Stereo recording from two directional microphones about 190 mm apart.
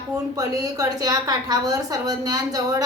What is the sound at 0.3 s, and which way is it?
A woman's voice, 20° right (ahead or behind).